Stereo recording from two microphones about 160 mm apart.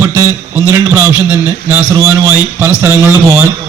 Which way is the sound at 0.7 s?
15° right (ahead or behind).